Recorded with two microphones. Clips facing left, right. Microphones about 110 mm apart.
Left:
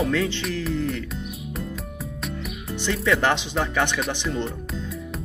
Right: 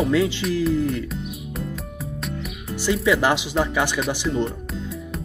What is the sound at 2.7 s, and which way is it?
Speech, 5° right (ahead or behind).